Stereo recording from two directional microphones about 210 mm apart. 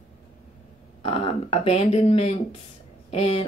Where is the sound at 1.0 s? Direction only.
25° left (ahead or behind).